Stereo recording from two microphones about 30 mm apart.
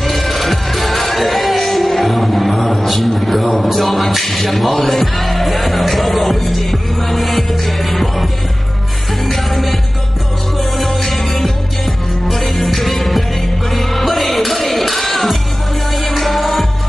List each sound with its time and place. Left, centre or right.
0.0 s music: centre